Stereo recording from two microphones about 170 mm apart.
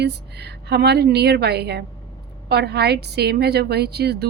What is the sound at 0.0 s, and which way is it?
A woman's voice, 80° right.